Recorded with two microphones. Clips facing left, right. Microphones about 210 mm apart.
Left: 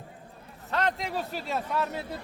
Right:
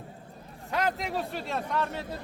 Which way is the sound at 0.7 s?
10° right (ahead or behind).